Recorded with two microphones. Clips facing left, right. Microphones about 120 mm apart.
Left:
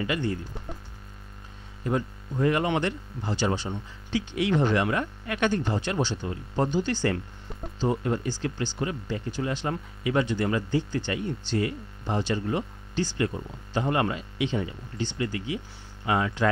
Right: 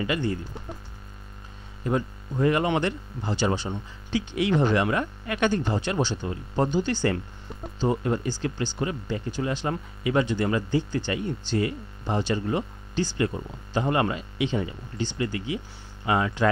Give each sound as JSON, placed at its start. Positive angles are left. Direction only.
{"t": 0.0, "sound": "speech", "side_deg": -20}
{"t": 1.9, "sound": "speech", "side_deg": -20}
{"t": 13.3, "sound": "speech", "side_deg": -35}
{"t": 13.7, "sound": "speech", "side_deg": -20}